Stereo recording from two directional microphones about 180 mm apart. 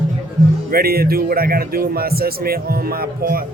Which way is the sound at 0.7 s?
55° right (ahead or behind).